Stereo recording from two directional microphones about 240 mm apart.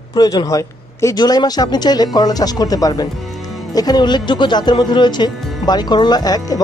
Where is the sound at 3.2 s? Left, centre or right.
Centre.